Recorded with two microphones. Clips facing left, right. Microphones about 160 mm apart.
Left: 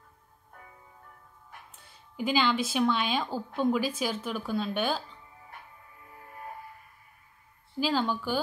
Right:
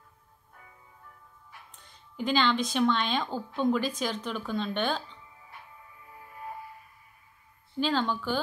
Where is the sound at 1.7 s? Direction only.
10° left (ahead or behind).